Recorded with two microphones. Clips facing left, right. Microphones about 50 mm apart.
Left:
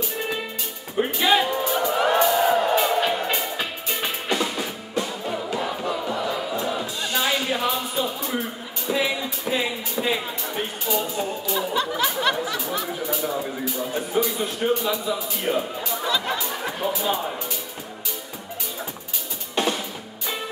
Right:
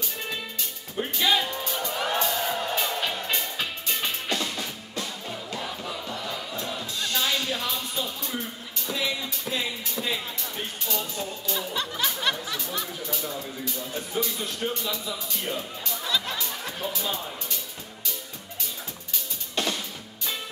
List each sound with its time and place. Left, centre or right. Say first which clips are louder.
0.9 s music: left 5 dB; left
12.5 s a sound: left 6 dB; centre
13.7 s music: left 7 dB; centre
13.9 s a man's voice: left 6 dB; centre
19.5 s drum: left 5 dB; centre